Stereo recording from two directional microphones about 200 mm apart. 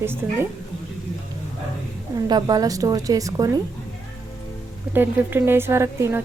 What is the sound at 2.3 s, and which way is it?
A woman's voice, 20° right (ahead or behind).